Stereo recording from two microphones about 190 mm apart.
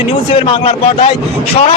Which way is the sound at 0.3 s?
30° left (ahead or behind).